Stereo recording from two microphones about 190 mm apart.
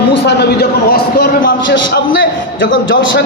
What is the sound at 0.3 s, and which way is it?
A man's voice, 60° left (ahead or behind).